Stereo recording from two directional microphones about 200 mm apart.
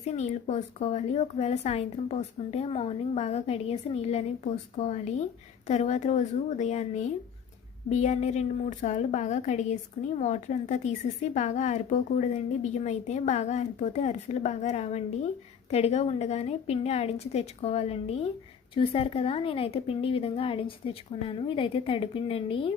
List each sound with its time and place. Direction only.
0.1 s a woman's voice: 35° left (ahead or behind)